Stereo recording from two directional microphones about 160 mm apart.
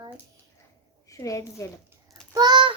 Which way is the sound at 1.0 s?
20° left (ahead or behind).